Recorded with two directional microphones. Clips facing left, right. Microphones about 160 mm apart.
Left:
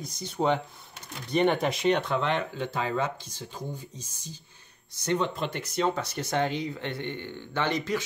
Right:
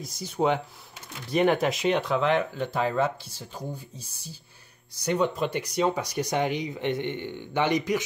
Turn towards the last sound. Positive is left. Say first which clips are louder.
# right 4 dB
turn(degrees=-15)  # may be behind; listen again after turning